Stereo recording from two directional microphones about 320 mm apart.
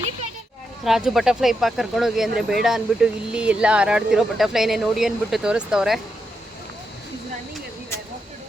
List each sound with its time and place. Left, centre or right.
0.9 s speech: centre